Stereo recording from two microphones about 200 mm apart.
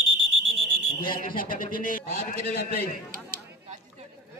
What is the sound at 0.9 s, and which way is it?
A man's voice, 45° left (ahead or behind).